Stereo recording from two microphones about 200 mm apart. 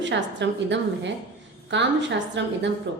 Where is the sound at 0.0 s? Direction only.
60° right (ahead or behind).